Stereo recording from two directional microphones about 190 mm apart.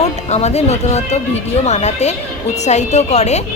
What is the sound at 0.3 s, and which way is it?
A woman's voice, 35° left (ahead or behind).